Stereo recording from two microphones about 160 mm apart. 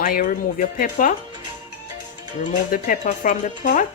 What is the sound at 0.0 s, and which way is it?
Speech, 55° left (ahead or behind).